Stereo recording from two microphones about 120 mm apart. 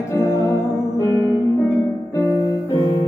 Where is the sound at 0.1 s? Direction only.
25° left (ahead or behind).